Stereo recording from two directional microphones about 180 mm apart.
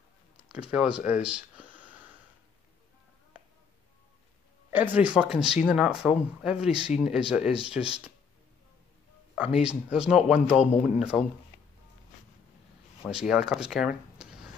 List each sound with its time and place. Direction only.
0.5 s speech: 5° right (ahead or behind)
1.2 s a sound: 5° right (ahead or behind)
4.7 s speech: 10° right (ahead or behind)
9.6 s speech: 5° right (ahead or behind)
10.5 s a man's voice: 40° left (ahead or behind)
10.8 s speech: 5° right (ahead or behind)
13.1 s speech: centre (ahead or behind)